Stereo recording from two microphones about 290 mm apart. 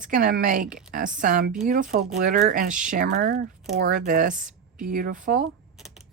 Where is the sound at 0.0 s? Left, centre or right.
Right.